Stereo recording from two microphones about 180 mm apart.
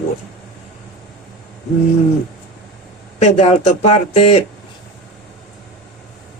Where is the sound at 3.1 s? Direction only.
35° left (ahead or behind).